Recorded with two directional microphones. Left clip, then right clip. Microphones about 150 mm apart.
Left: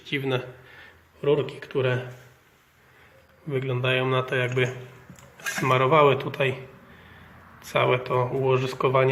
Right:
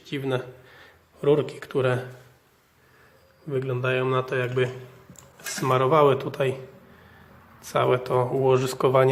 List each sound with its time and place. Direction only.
0.0 s a man's voice: 10° right (ahead or behind)
1.2 s speech: 40° right (ahead or behind)
3.5 s a man's voice: centre (ahead or behind)
5.5 s speech: 10° right (ahead or behind)
7.7 s speech: 15° right (ahead or behind)